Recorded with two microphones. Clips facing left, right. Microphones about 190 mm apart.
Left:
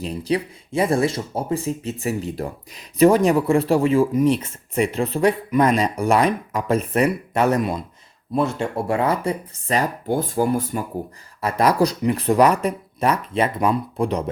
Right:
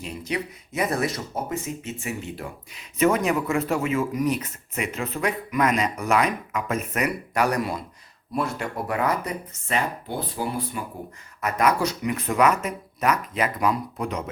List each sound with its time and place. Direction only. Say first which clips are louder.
0.0 s speech: left 7 dB; 35° left (ahead or behind)
11.3 s speech: left 4 dB; 30° left (ahead or behind)